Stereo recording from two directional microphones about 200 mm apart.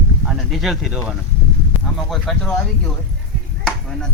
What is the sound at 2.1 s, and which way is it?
Speech, 5° left (ahead or behind).